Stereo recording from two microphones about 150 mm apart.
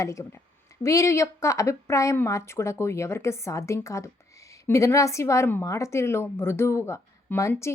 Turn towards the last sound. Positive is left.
turn(degrees=20)  # may be behind; listen again after turning